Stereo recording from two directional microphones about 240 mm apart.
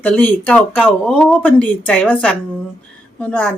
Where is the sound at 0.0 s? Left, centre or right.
Centre.